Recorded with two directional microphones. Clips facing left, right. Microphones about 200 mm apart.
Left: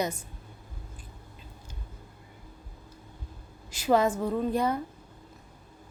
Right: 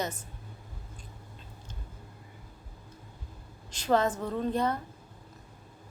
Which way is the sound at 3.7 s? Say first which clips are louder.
Left 3 dB; 10° left (ahead or behind).